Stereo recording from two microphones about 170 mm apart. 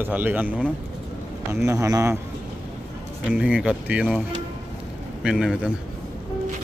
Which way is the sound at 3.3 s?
5° right (ahead or behind).